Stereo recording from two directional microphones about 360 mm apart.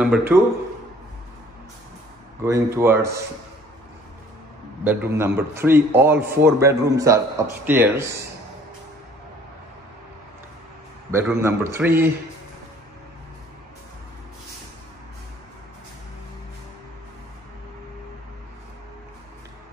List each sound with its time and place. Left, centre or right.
0.0 s speech: centre
2.4 s a man's voice: centre
4.8 s a man's voice: centre
11.1 s a man's voice: centre